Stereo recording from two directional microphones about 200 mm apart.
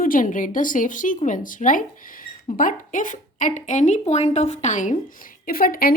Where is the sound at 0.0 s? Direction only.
40° left (ahead or behind).